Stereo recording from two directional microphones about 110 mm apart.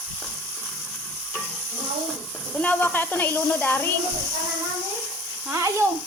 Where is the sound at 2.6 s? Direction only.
15° left (ahead or behind).